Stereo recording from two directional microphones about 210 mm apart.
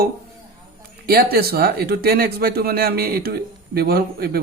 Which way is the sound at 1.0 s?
45° right (ahead or behind).